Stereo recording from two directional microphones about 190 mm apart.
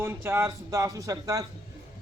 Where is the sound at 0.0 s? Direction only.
10° right (ahead or behind).